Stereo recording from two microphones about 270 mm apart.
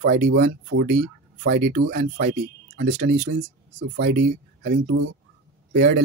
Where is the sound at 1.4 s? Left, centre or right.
Right.